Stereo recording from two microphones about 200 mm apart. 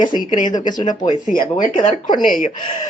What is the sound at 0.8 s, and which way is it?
Speech, 20° left (ahead or behind).